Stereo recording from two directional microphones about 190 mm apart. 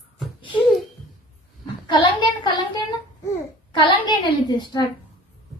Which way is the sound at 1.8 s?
25° left (ahead or behind).